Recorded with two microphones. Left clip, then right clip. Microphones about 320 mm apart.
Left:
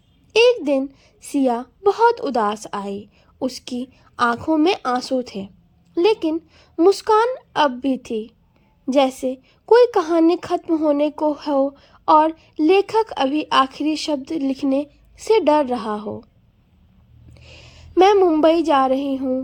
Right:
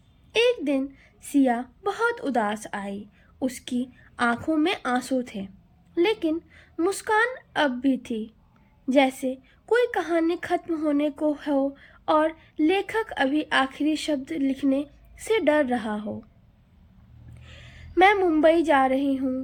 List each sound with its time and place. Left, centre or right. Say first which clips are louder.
0.3 s a sound: left 7 dB; centre
1.3 s a woman's voice: left 3 dB; centre
17.4 s a woman's voice: left 4 dB; centre